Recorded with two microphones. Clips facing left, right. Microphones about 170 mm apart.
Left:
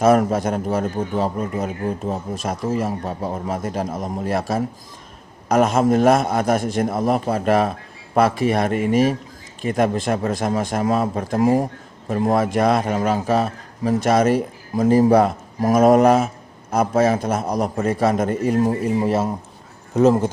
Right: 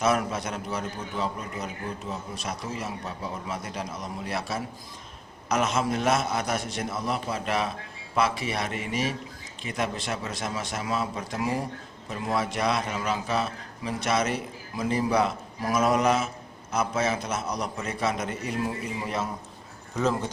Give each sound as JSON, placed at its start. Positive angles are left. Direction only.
{"t": 0.0, "sound": "speech", "side_deg": 45}